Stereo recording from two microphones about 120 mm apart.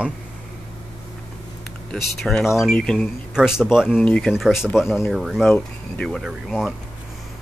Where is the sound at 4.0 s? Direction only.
10° left (ahead or behind).